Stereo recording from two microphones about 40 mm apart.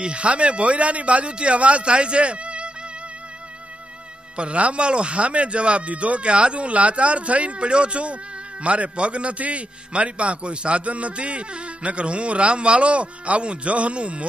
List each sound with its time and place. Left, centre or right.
0.0 s a man's voice: right
4.4 s a man's voice: right